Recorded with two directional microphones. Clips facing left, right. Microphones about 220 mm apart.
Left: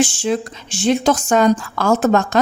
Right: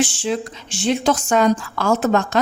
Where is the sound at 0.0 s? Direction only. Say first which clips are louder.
Left 3 dB; 45° left (ahead or behind).